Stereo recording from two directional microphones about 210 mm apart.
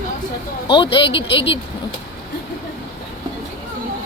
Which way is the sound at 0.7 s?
25° left (ahead or behind).